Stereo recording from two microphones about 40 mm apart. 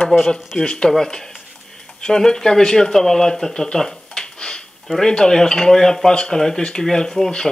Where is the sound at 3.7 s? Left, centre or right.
Centre.